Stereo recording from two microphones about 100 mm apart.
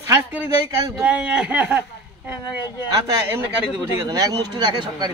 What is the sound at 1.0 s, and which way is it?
Speech, 10° right (ahead or behind).